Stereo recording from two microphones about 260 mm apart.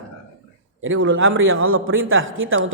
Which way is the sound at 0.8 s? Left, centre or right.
Right.